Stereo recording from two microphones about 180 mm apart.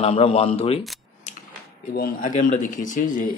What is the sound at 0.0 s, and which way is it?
Speech, 35° left (ahead or behind).